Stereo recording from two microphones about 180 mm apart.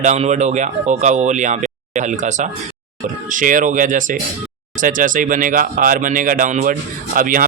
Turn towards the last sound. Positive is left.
turn(degrees=-50)  # may be behind; listen again after turning